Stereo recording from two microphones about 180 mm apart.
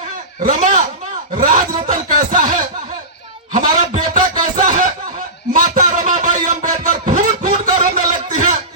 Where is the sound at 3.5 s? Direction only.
40° right (ahead or behind).